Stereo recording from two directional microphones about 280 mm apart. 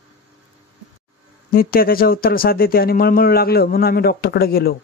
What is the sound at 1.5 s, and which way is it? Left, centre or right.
Speech, left.